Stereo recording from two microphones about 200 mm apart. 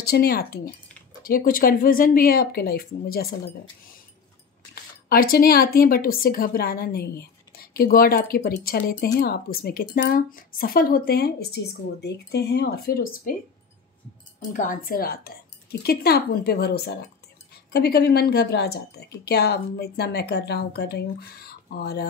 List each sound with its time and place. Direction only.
0.0 s speech: 50° left (ahead or behind)
5.1 s speech: 45° left (ahead or behind)
14.5 s speech: 40° left (ahead or behind)